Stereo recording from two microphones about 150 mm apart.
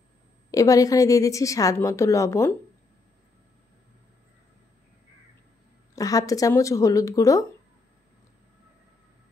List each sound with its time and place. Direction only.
0.5 s a woman's voice: 20° left (ahead or behind)
5.9 s a woman's voice: 25° left (ahead or behind)